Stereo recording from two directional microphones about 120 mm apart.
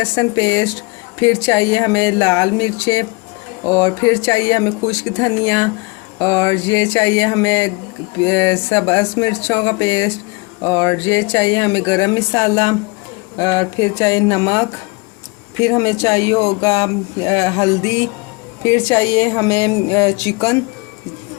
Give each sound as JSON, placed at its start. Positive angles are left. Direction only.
{"t": 0.2, "sound": "speech", "side_deg": 25}
{"t": 15.6, "sound": "speech", "side_deg": 25}